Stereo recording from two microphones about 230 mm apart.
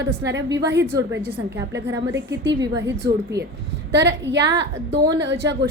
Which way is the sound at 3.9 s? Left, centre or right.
Right.